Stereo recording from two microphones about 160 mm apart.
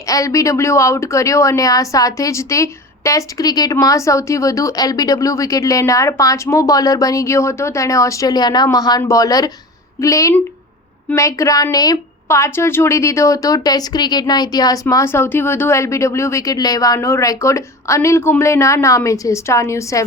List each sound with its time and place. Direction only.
0.1 s a woman's voice: 20° left (ahead or behind)